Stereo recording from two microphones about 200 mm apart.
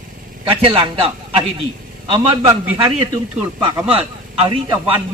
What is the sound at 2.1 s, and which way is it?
Speech, 25° right (ahead or behind).